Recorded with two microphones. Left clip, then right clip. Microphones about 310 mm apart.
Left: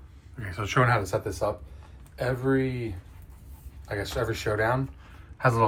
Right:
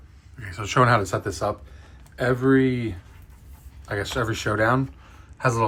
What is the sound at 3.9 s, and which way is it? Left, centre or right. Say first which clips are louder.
Speech: right 4 dB; right.